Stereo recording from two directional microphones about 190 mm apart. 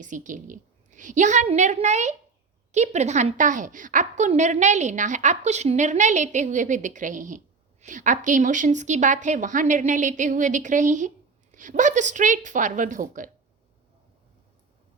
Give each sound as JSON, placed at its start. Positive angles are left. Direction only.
{"t": 0.0, "sound": "a woman's voice", "side_deg": -40}